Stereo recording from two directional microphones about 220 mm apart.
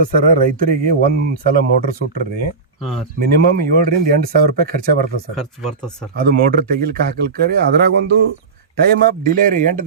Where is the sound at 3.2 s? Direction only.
45° right (ahead or behind).